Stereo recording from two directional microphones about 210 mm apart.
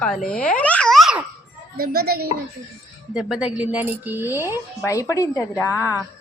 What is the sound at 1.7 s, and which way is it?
Speech, 50° right (ahead or behind).